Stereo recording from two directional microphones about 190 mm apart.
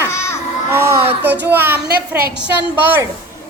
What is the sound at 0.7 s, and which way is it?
A woman's voice, 15° right (ahead or behind).